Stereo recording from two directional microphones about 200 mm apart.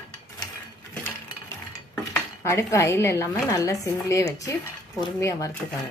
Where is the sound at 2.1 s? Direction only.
15° left (ahead or behind).